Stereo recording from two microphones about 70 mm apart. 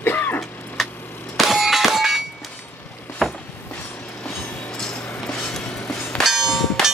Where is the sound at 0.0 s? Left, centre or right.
Left.